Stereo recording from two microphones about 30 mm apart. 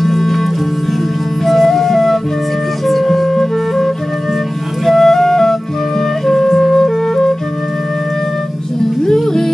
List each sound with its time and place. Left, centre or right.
0.0 s music: centre
1.4 s flute: centre
6.7 s flute: centre